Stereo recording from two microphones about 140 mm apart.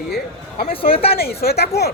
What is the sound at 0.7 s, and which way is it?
Speech, 40° left (ahead or behind).